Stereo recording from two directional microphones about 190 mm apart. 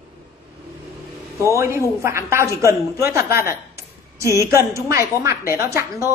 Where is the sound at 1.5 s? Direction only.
15° right (ahead or behind).